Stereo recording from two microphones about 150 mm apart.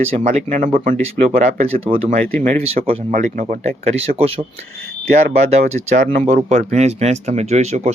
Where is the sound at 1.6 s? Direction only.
40° right (ahead or behind).